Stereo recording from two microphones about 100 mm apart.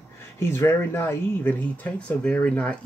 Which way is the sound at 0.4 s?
25° left (ahead or behind).